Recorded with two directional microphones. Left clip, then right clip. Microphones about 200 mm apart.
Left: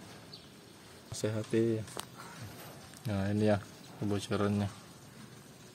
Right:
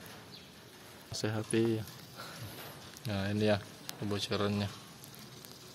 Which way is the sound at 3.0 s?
15° left (ahead or behind).